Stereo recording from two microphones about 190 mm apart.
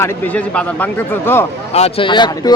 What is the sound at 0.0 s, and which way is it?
A man's voice, 5° left (ahead or behind).